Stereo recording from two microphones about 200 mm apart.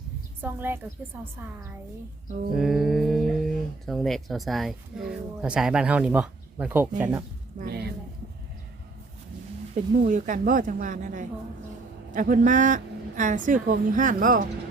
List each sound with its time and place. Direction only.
0.4 s a woman's voice: 10° right (ahead or behind)
2.5 s a woman's voice: centre (ahead or behind)
7.6 s a sound: 55° right (ahead or behind)
10.0 s a woman's voice: 40° right (ahead or behind)